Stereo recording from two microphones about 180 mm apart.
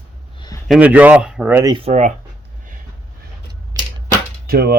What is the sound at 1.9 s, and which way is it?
Speech, 40° right (ahead or behind).